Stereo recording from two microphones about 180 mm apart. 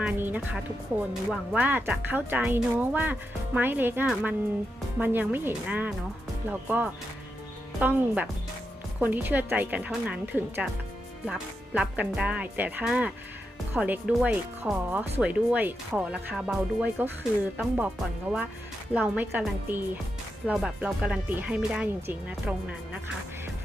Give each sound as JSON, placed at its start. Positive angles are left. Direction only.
{"t": 0.0, "sound": "speech", "side_deg": -10}